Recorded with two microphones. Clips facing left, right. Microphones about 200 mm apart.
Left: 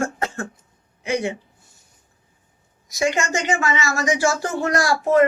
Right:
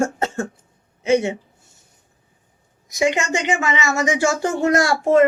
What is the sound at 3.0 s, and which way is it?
Speech, 20° right (ahead or behind).